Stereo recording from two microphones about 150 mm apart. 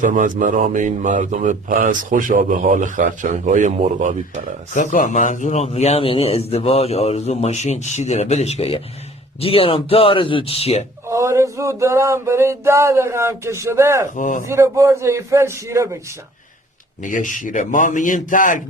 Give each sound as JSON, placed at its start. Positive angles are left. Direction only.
{"t": 0.0, "sound": "speech", "side_deg": -60}
{"t": 4.7, "sound": "speech", "side_deg": 55}
{"t": 11.1, "sound": "a sound", "side_deg": -20}
{"t": 14.2, "sound": "a man's voice", "side_deg": 60}
{"t": 14.4, "sound": "a man's voice", "side_deg": -20}
{"t": 17.0, "sound": "a man's voice", "side_deg": 60}